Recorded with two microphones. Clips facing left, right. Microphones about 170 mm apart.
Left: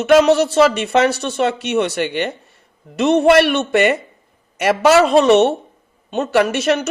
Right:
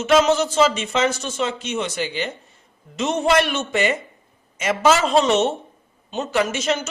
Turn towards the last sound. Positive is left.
turn(degrees=65)  # may be behind; listen again after turning